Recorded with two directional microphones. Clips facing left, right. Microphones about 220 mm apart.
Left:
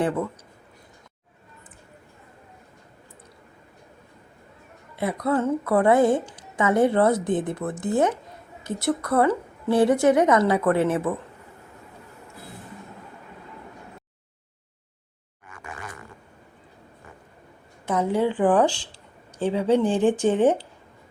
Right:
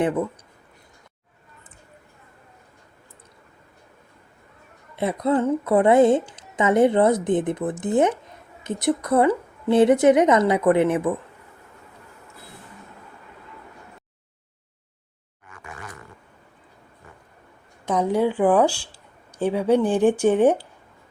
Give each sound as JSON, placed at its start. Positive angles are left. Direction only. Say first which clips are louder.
{"t": 4.9, "sound": "a woman's voice", "louder": "right 2 dB", "side_deg": -25}
{"t": 17.8, "sound": "a woman's voice", "louder": "right 2 dB", "side_deg": -15}